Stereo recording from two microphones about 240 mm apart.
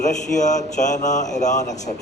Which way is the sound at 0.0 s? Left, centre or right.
Left.